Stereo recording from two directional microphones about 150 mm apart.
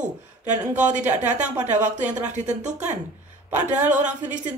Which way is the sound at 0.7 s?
55° right (ahead or behind).